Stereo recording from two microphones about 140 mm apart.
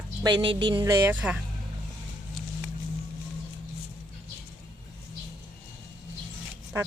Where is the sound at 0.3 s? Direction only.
35° right (ahead or behind).